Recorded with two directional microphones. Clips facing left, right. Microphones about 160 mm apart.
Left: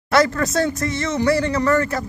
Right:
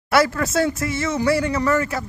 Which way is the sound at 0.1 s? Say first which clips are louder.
Left 1 dB; 5° right (ahead or behind).